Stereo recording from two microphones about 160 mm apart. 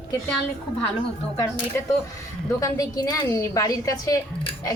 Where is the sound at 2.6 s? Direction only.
20° left (ahead or behind).